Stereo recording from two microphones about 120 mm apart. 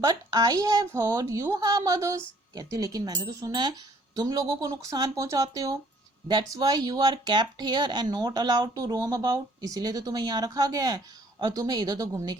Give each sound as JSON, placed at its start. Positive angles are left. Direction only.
{"t": 0.0, "sound": "speech", "side_deg": -30}